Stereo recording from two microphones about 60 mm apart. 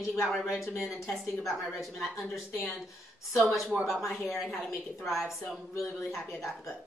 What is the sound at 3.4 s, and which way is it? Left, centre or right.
Speech, centre.